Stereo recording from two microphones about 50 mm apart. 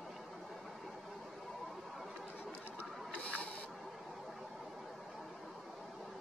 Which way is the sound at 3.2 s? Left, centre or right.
Left.